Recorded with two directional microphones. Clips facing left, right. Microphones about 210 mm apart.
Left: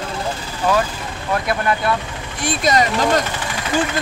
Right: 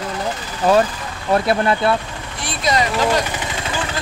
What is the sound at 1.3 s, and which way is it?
Speech, 30° right (ahead or behind).